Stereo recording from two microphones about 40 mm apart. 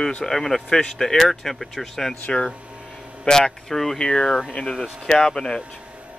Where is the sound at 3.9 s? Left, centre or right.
Left.